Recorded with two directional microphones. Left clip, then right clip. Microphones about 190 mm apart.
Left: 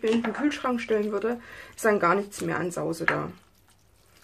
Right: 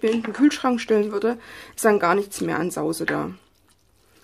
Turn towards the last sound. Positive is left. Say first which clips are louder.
# right 2 dB
turn(degrees=-55)  # may be behind; listen again after turning